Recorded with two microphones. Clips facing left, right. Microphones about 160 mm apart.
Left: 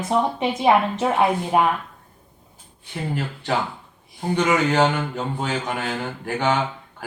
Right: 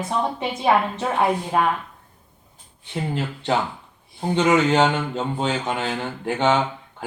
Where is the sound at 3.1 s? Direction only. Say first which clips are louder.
Right 1 dB; 20° right (ahead or behind).